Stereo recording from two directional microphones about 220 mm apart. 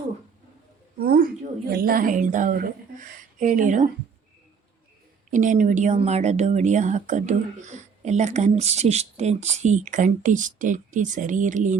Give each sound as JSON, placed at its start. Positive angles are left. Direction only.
{"t": 0.9, "sound": "a woman's voice", "side_deg": -40}
{"t": 5.3, "sound": "a woman's voice", "side_deg": -35}